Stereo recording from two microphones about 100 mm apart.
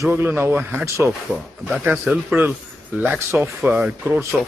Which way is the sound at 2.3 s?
20° right (ahead or behind).